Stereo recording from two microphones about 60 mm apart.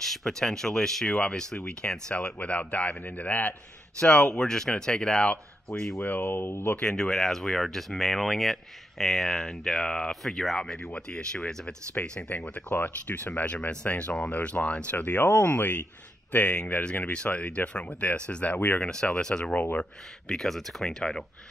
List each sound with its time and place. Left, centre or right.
0.0 s speech: centre; by 3.5 s left
4.0 s speech: centre
5.9 s speech: left
6.8 s speech: centre; by 18.8 s left
18.8 s speech: centre
20.2 s speech: centre